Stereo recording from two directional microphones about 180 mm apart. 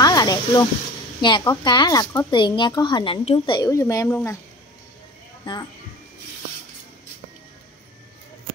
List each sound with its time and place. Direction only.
0.0 s a sound: 20° left (ahead or behind)
1.2 s a woman's voice: 25° left (ahead or behind)
5.4 s speech: 25° left (ahead or behind)